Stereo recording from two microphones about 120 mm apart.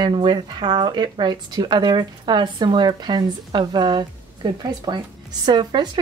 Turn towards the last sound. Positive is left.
turn(degrees=-40)  # may be behind; listen again after turning